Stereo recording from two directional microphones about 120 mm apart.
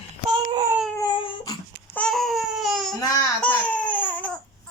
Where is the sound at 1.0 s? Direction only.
45° left (ahead or behind).